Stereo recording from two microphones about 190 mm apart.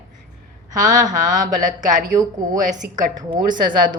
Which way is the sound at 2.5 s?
40° right (ahead or behind).